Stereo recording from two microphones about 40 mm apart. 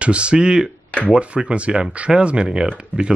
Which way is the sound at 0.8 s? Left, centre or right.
Left.